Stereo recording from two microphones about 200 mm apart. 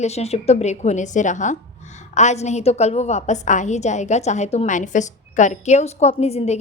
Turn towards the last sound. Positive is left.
turn(degrees=30)  # may be behind; listen again after turning